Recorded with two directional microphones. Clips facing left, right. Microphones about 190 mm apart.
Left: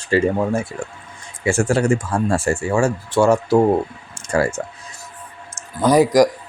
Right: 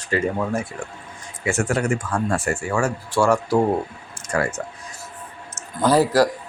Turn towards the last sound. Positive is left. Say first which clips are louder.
# left 3 dB
turn(degrees=15)  # may be behind; listen again after turning